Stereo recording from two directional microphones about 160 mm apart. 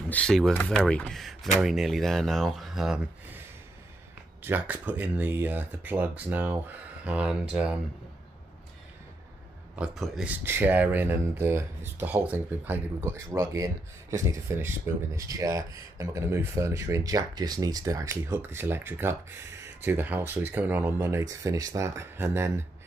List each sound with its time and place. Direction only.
0.1 s speech: 5° left (ahead or behind)
4.4 s speech: 10° right (ahead or behind)
9.8 s speech: centre (ahead or behind)